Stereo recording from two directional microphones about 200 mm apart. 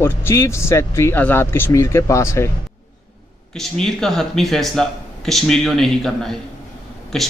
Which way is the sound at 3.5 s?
Centre (ahead or behind).